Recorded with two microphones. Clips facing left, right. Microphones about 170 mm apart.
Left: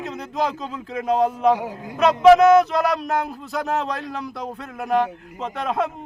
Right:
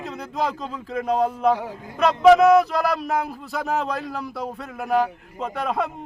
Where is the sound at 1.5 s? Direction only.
15° left (ahead or behind).